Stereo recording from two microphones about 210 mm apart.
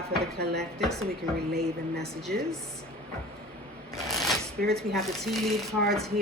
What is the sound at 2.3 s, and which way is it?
Speech, 45° right (ahead or behind).